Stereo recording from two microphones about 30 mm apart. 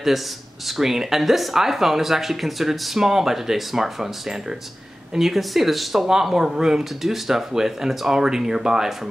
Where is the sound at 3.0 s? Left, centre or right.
Centre.